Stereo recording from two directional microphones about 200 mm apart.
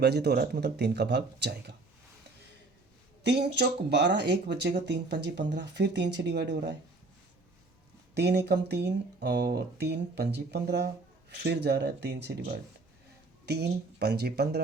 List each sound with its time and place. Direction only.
0.0 s speech: 55° right (ahead or behind)
3.2 s speech: 60° right (ahead or behind)
8.1 s speech: 55° right (ahead or behind)